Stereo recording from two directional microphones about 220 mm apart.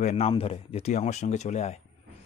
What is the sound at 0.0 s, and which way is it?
Speech, 30° left (ahead or behind).